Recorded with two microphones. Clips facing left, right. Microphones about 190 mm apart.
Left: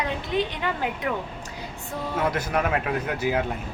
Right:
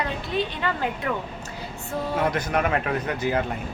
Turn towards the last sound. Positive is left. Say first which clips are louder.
# even
turn(degrees=5)  # may be behind; listen again after turning